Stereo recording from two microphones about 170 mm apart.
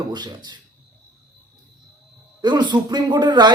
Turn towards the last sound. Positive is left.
turn(degrees=-25)  # may be behind; listen again after turning